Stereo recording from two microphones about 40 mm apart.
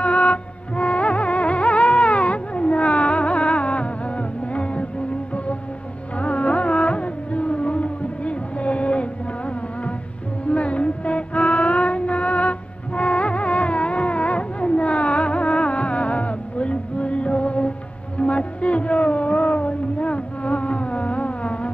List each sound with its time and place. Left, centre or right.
0.0 s music: left
6.1 s music: left
18.1 s a sound: left